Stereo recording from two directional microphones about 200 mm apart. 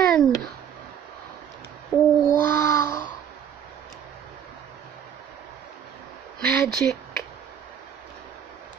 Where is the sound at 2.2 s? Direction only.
15° left (ahead or behind).